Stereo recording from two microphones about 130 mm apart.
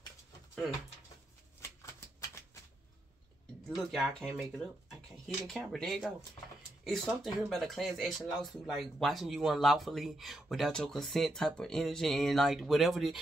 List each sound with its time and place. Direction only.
3.6 s speech: centre (ahead or behind)